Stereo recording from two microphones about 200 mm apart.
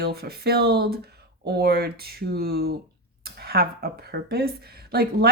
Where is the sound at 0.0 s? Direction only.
50° right (ahead or behind).